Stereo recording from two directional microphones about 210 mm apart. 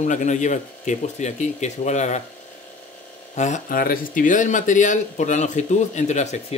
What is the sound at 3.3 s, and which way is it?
Speech, 35° left (ahead or behind).